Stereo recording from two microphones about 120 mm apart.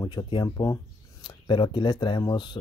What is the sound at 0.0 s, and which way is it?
Speech, 35° left (ahead or behind).